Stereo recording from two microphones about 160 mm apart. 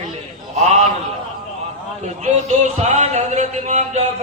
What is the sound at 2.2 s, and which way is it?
Speech, 45° right (ahead or behind).